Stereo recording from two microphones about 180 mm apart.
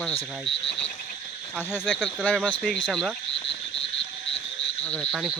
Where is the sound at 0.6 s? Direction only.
35° left (ahead or behind).